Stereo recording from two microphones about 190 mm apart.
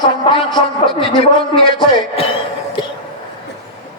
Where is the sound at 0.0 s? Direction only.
25° left (ahead or behind).